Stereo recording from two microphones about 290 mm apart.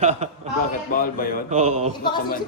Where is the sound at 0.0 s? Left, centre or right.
Right.